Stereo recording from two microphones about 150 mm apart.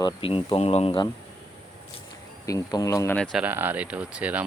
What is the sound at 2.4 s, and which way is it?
Speech, 25° left (ahead or behind).